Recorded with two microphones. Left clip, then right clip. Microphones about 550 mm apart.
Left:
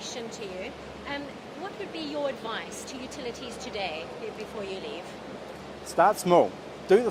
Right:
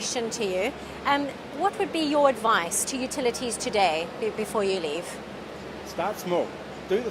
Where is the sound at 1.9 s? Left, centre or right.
Right.